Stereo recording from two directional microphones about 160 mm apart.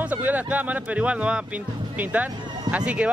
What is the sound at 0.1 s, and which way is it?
Speech, 10° right (ahead or behind).